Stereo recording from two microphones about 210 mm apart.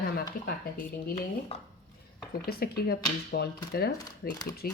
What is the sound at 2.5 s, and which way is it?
Speech, 45° left (ahead or behind).